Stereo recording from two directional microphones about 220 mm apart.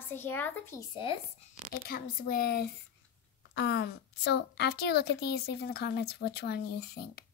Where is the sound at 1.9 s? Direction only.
40° left (ahead or behind).